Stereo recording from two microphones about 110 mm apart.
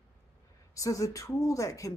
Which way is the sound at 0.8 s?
30° left (ahead or behind).